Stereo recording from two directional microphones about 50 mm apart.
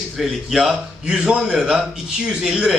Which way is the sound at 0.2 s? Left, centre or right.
Centre.